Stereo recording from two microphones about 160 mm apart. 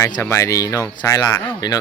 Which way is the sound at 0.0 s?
15° left (ahead or behind).